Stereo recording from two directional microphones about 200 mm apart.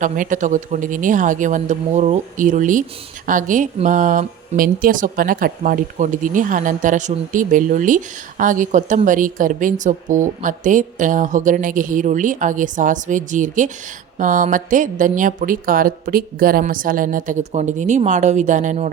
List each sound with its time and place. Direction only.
0.0 s speech: 40° right (ahead or behind)